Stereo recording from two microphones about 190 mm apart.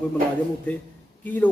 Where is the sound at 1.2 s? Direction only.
10° left (ahead or behind).